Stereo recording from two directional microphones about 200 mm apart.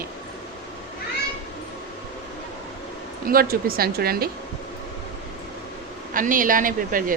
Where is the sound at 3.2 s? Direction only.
45° right (ahead or behind).